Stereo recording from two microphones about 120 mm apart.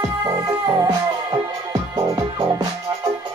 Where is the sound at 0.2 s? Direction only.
30° right (ahead or behind).